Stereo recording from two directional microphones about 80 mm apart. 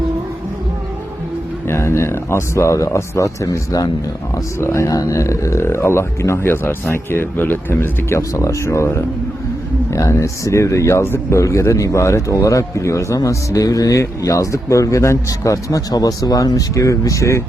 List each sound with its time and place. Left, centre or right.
1.6 s speech: left
8.3 s speech: left